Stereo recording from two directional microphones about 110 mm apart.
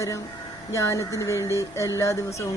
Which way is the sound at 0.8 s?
25° left (ahead or behind).